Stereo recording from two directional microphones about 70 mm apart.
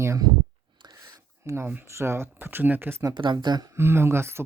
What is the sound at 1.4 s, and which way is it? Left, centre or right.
Speech, right.